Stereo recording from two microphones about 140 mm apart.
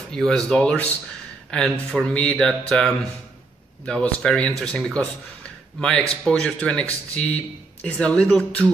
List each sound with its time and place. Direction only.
0.1 s speech: 5° left (ahead or behind)